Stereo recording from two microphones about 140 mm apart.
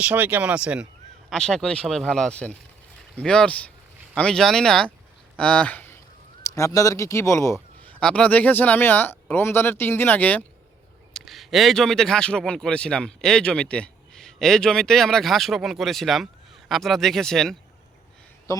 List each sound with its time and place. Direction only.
0.0 s speech: 10° right (ahead or behind)
1.3 s speech: 5° left (ahead or behind)
6.4 s speech: 25° left (ahead or behind)
7.9 s speech: 10° left (ahead or behind)
11.1 s speech: centre (ahead or behind)